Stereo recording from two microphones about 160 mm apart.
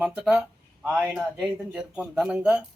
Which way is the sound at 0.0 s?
5° right (ahead or behind).